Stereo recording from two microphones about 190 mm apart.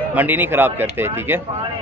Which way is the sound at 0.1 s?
10° right (ahead or behind).